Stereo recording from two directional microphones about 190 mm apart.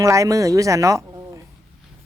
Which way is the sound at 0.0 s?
15° right (ahead or behind).